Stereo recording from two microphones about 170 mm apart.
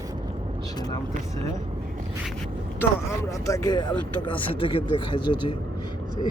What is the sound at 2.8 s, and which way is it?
Speech, 15° left (ahead or behind).